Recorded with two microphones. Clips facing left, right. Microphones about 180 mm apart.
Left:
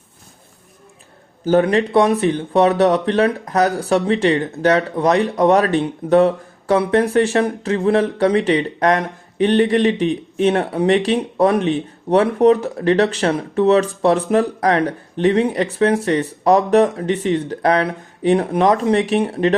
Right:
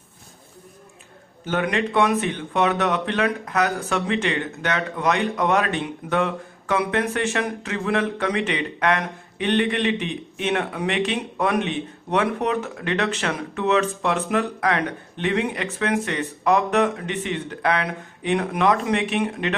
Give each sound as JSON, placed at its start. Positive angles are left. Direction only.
{"t": 1.5, "sound": "speech", "side_deg": 35}